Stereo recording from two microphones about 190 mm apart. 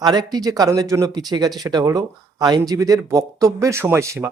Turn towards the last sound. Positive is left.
turn(degrees=-15)  # may be behind; listen again after turning